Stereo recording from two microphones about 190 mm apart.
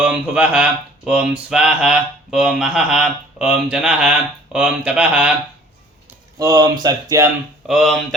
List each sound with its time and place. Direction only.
0.0 s speech: 5° right (ahead or behind)
6.4 s speech: 20° right (ahead or behind)
7.7 s speech: centre (ahead or behind)